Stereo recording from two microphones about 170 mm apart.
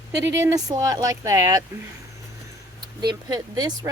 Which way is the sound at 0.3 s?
15° right (ahead or behind).